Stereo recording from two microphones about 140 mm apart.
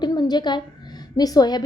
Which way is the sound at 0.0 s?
30° left (ahead or behind).